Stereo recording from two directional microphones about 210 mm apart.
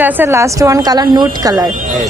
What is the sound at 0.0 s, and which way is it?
Speech, 10° right (ahead or behind).